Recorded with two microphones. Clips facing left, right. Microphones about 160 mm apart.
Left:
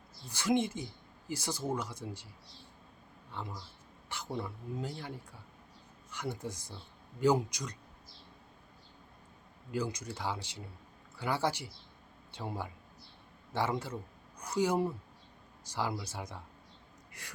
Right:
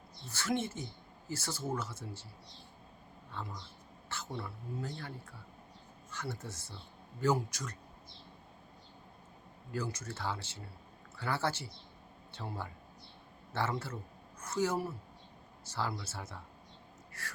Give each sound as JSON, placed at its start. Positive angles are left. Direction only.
{"t": 0.3, "sound": "speech", "side_deg": 15}
{"t": 3.4, "sound": "speech", "side_deg": 15}
{"t": 9.7, "sound": "speech", "side_deg": 15}